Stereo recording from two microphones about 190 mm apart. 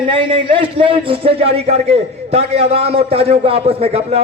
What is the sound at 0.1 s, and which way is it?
A man's voice, 25° right (ahead or behind).